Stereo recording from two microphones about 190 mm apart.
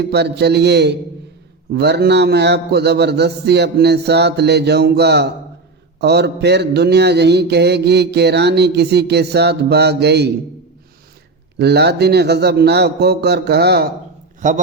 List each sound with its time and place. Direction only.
0.0 s mantra: 60° right (ahead or behind)
11.5 s mantra: 60° right (ahead or behind)